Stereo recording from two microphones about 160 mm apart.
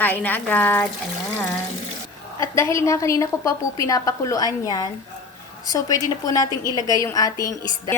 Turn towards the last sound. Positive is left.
turn(degrees=20)  # may be behind; listen again after turning